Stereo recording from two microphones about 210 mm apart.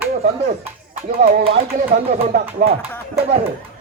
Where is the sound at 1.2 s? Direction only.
30° right (ahead or behind).